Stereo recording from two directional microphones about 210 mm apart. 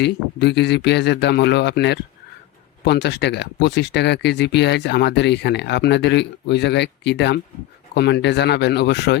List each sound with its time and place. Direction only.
0.0 s speech: 55° left (ahead or behind)